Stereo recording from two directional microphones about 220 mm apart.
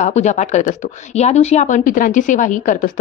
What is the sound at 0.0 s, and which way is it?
Speech, 30° left (ahead or behind).